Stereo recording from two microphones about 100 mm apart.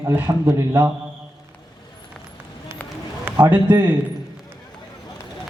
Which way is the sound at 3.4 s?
20° right (ahead or behind).